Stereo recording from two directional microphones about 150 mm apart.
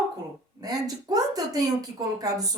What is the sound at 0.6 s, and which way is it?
Speech, 25° right (ahead or behind).